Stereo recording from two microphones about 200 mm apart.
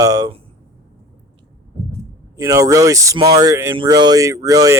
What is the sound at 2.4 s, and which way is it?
Speech, 15° right (ahead or behind).